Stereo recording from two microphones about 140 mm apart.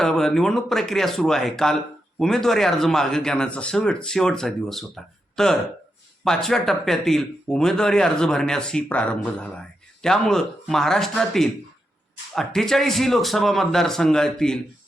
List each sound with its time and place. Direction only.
0.0 s speech: 5° left (ahead or behind)